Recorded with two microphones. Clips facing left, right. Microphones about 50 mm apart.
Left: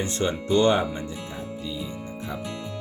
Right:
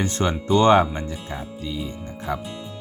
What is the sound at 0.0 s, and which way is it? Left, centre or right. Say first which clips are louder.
Speech: right 3 dB; right.